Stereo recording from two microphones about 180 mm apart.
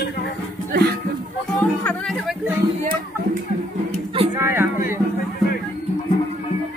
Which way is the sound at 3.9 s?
30° right (ahead or behind).